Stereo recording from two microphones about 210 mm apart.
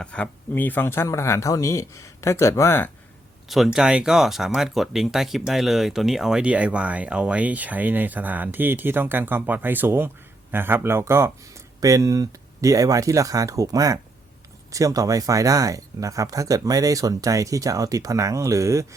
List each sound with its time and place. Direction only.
0.0 s speech: 5° left (ahead or behind)
3.5 s speech: centre (ahead or behind)